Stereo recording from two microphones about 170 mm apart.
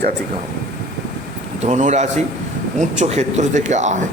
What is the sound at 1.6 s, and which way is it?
A man's voice, 45° right (ahead or behind).